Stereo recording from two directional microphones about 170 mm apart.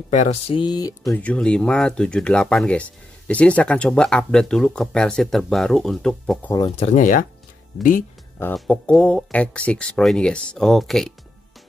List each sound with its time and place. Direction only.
0.1 s speech: 40° left (ahead or behind); by 0.9 s 25° left (ahead or behind)
1.1 s speech: 10° left (ahead or behind)
6.8 s speech: 45° left (ahead or behind)
8.5 s speech: 5° left (ahead or behind)